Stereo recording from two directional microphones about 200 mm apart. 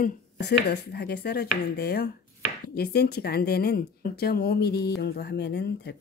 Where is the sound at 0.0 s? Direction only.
55° left (ahead or behind).